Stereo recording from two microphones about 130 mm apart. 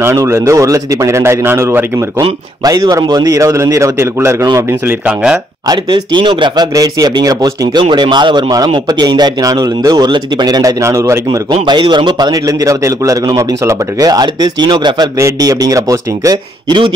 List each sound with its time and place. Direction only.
0.0 s a man's voice: 20° right (ahead or behind)
5.0 s speech: 10° right (ahead or behind)
5.7 s a man's voice: 40° right (ahead or behind); by 11.1 s 25° right (ahead or behind)
11.6 s a man's voice: 35° right (ahead or behind)